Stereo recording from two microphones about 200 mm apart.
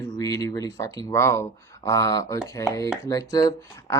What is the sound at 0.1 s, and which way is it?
Speech, 15° left (ahead or behind).